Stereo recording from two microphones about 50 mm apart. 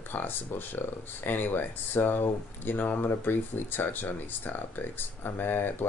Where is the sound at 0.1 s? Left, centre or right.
Left.